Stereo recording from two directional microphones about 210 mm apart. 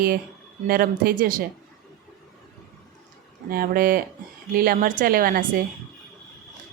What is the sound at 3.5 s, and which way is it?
Speech, 45° right (ahead or behind).